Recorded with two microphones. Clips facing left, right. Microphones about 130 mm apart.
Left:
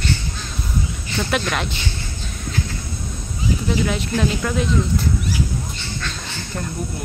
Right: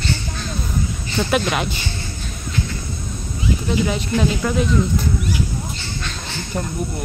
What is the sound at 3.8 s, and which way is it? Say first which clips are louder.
Speech: right 1 dB; centre (ahead or behind).